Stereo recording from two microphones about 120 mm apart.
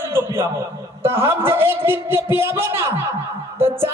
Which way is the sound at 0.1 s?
20° right (ahead or behind).